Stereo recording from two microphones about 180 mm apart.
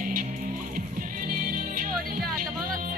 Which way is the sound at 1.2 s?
50° right (ahead or behind).